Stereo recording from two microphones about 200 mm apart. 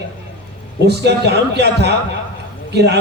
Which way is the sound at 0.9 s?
55° right (ahead or behind).